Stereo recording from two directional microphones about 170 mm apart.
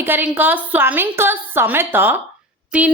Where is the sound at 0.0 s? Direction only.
10° right (ahead or behind).